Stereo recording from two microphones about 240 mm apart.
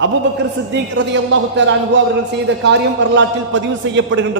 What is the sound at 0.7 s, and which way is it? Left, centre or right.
A man's voice, right.